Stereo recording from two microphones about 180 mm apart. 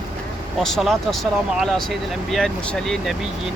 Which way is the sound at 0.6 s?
Centre (ahead or behind).